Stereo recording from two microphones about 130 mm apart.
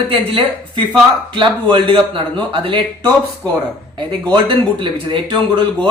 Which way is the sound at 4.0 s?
35° right (ahead or behind).